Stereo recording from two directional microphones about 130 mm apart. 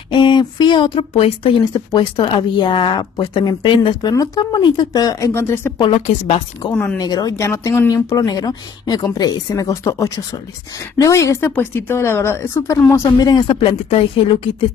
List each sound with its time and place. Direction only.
0.1 s speech: 35° left (ahead or behind)
1.6 s speech: 30° left (ahead or behind)
5.8 s a woman's voice: 45° left (ahead or behind)
6.7 s speech: 10° left (ahead or behind)
7.0 s speech: 30° left (ahead or behind)
13.6 s a woman's voice: 45° left (ahead or behind)